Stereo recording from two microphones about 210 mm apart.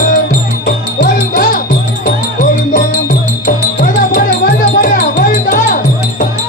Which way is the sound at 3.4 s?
45° left (ahead or behind).